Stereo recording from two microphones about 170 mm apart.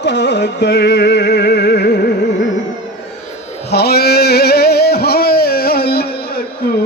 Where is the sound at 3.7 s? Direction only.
70° left (ahead or behind).